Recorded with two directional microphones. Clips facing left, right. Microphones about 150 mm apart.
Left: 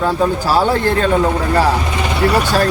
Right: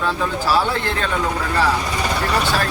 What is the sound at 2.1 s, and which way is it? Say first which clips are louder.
Speech: left 7 dB; 15° left (ahead or behind).